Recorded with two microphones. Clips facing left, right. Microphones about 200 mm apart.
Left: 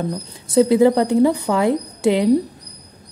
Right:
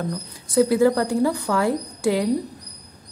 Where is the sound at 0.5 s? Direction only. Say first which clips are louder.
Left 4 dB; 20° left (ahead or behind).